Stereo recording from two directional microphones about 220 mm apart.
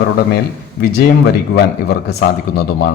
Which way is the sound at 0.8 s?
50° left (ahead or behind).